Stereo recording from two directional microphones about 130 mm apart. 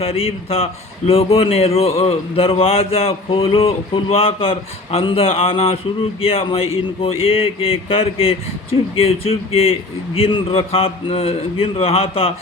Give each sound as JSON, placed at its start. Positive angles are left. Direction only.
{"t": 0.0, "sound": "a man's voice", "side_deg": 50}